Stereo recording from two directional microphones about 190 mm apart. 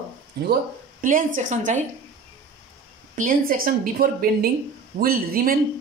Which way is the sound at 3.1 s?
45° right (ahead or behind).